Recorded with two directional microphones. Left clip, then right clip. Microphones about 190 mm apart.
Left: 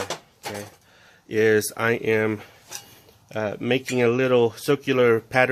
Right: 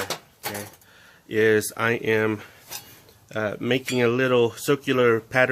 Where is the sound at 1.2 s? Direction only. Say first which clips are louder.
Even; 15° left (ahead or behind).